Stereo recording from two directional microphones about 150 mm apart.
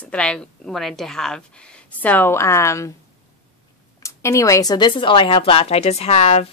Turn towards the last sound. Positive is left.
turn(degrees=50)  # may be behind; listen again after turning